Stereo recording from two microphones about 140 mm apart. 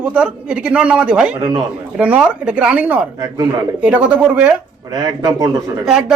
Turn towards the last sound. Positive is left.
turn(degrees=-5)  # may be behind; listen again after turning